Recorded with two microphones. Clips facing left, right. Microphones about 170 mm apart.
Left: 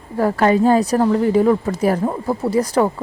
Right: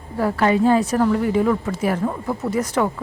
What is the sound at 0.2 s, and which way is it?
Speech, 45° left (ahead or behind).